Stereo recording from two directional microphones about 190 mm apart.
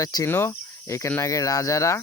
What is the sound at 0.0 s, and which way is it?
Speech, 20° left (ahead or behind).